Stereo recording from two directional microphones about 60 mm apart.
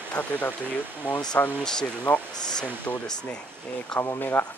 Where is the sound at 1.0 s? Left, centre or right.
Right.